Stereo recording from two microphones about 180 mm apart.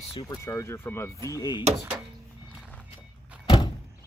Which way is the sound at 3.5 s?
25° left (ahead or behind).